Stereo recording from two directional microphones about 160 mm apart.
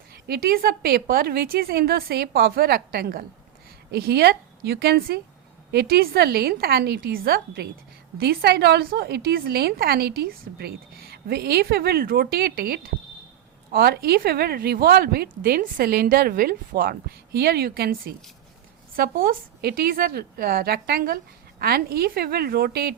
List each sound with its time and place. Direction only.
0.1 s a woman's voice: 75° right (ahead or behind)
3.9 s a woman's voice: 85° right